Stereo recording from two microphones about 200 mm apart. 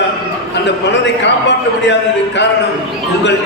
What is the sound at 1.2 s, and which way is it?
A man's voice, 60° left (ahead or behind).